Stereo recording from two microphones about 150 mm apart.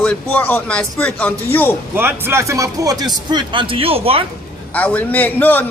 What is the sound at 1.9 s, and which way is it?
A man's voice, 15° right (ahead or behind).